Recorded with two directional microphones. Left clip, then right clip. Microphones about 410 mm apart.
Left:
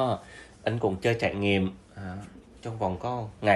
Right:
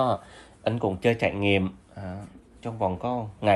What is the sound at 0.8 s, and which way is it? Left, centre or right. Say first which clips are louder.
Speech: right 2 dB; centre.